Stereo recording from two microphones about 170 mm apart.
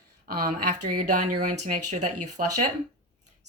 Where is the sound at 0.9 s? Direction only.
45° right (ahead or behind).